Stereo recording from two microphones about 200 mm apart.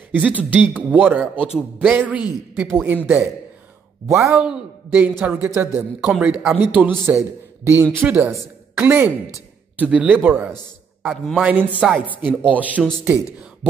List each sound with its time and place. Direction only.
0.1 s speech: 5° right (ahead or behind)
4.1 s speech: 15° right (ahead or behind)